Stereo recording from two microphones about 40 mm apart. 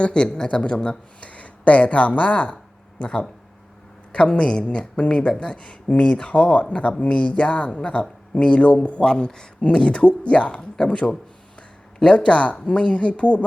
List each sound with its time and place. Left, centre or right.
0.0 s speech: left
0.4 s speech: left
4.3 s speech: left
9.0 s speech: left